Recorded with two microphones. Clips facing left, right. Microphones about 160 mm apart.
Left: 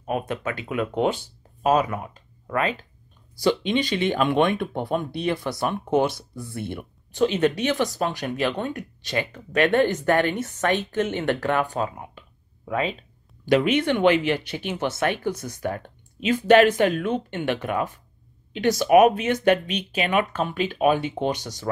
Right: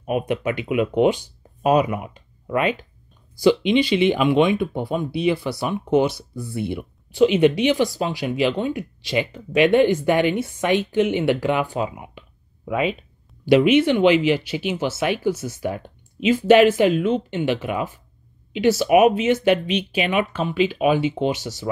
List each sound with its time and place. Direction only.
0.0 s speech: 15° right (ahead or behind)
16.9 s speech: 50° left (ahead or behind)
17.4 s speech: 10° right (ahead or behind)
20.0 s speech: 45° left (ahead or behind)